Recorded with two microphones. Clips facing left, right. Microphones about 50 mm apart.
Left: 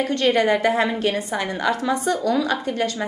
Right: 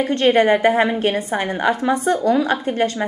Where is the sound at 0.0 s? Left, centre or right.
Right.